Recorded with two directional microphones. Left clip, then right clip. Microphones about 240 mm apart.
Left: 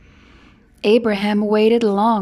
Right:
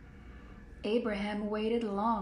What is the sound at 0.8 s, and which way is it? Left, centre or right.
Speech, left.